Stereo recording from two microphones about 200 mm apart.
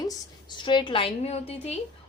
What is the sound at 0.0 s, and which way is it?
A woman's voice, 20° left (ahead or behind).